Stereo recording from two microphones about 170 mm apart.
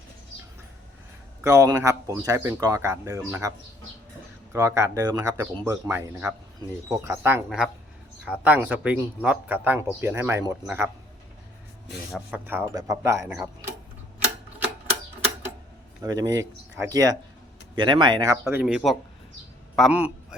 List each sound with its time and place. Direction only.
1.5 s speech: 15° right (ahead or behind)
4.5 s speech: 15° right (ahead or behind)
12.1 s speech: 10° right (ahead or behind)
16.0 s speech: 20° right (ahead or behind)
18.6 s speech: centre (ahead or behind)